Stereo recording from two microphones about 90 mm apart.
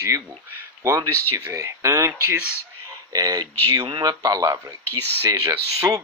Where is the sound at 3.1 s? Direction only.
45° right (ahead or behind).